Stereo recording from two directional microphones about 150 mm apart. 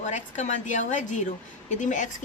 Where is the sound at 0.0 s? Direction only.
55° left (ahead or behind).